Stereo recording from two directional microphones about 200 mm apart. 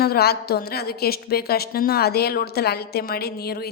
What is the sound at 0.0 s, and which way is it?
A woman's voice, 50° left (ahead or behind).